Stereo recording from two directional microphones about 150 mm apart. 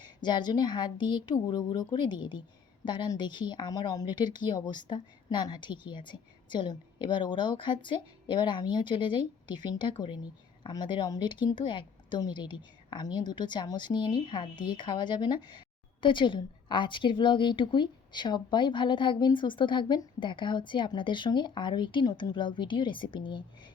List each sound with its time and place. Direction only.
0.0 s speech: 30° left (ahead or behind)